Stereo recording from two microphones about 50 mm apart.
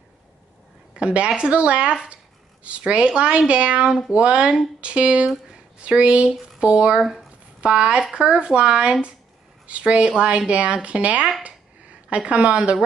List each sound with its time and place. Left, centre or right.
0.9 s speech: right
11.4 s a sound: right
12.3 s speech: right